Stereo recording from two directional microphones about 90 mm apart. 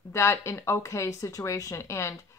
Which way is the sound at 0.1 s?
30° left (ahead or behind).